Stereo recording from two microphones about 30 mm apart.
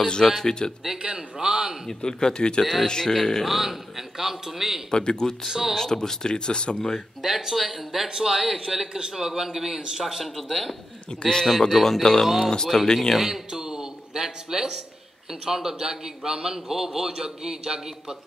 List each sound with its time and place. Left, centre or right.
0.0 s speech: left
1.0 s speech: right
2.0 s speech: left
2.6 s speech: centre
3.4 s a man's voice: centre
4.9 s speech: left
5.5 s a man's voice: centre
5.8 s speech: left
7.2 s a man's voice: centre
11.1 s speech: left
11.7 s speech: centre
12.0 s speech: left
13.5 s a man's voice: centre